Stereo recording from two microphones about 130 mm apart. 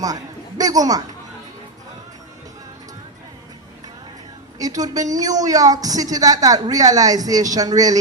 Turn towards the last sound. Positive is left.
turn(degrees=-30)  # may be behind; listen again after turning